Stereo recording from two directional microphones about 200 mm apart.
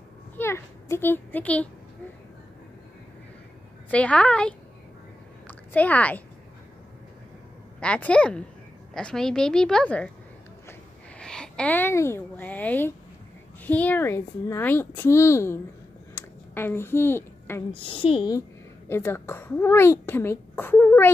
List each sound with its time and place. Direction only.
0.4 s a child's voice: 10° left (ahead or behind)
3.9 s a woman's voice: 5° left (ahead or behind)
7.8 s a woman's voice: 5° left (ahead or behind)
11.1 s a woman's voice: 5° left (ahead or behind)
16.2 s a sound: 10° left (ahead or behind)
17.7 s a woman's voice: 25° left (ahead or behind)
18.9 s a child's voice: 10° left (ahead or behind)